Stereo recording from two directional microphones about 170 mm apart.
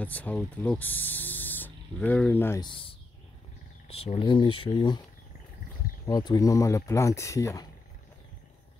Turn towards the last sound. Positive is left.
turn(degrees=20)  # may be behind; listen again after turning